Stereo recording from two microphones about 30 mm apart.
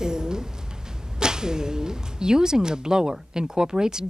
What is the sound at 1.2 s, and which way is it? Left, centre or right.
Speech, right.